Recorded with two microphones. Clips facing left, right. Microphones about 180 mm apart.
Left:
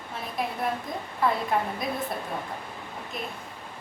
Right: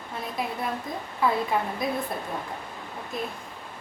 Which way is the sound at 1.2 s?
Centre (ahead or behind).